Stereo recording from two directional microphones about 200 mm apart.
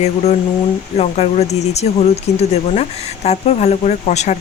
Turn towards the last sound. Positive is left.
turn(degrees=35)  # may be behind; listen again after turning